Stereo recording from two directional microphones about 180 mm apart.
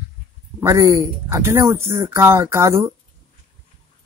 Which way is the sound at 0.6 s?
15° right (ahead or behind).